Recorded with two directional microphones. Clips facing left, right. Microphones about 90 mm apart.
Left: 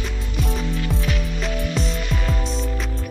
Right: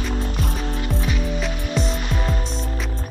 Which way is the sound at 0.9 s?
Centre (ahead or behind).